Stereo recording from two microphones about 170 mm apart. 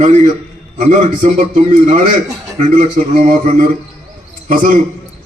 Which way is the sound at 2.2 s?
20° right (ahead or behind).